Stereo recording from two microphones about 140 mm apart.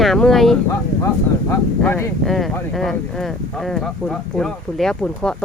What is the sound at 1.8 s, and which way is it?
Speech, 15° left (ahead or behind).